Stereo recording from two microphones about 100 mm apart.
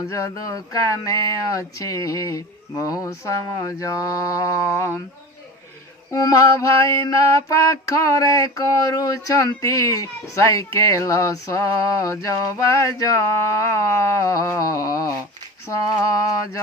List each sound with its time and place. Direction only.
0.1 s mantra: 35° left (ahead or behind)
6.1 s mantra: 35° left (ahead or behind)